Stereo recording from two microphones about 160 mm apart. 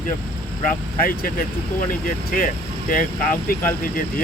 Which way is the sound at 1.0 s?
65° left (ahead or behind).